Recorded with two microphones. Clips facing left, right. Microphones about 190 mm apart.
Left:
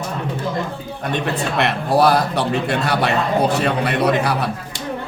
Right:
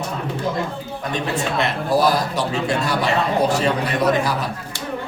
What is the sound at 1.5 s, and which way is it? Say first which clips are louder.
A man's voice: left 3 dB; 60° left (ahead or behind).